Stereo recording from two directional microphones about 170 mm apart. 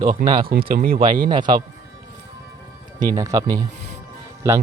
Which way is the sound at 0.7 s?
55° right (ahead or behind).